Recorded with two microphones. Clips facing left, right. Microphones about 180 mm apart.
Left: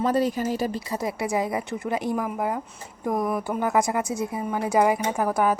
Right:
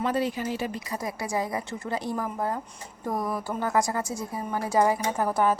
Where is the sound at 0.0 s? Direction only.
40° left (ahead or behind).